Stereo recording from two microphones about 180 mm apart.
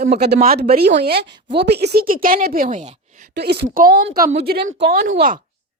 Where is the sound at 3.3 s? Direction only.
65° right (ahead or behind).